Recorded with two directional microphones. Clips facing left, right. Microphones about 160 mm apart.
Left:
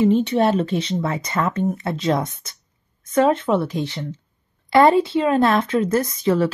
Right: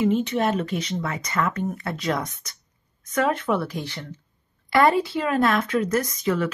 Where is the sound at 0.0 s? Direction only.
30° left (ahead or behind).